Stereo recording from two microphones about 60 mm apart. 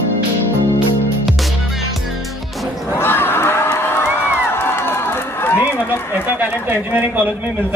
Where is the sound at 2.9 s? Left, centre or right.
Left.